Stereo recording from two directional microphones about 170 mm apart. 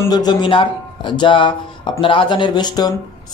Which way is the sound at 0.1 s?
25° left (ahead or behind).